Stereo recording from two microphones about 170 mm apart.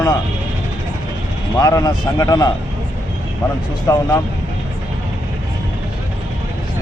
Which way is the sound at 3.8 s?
20° left (ahead or behind).